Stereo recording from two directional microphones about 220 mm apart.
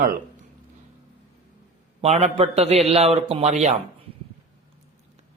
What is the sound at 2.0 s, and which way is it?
A man's voice, 30° right (ahead or behind).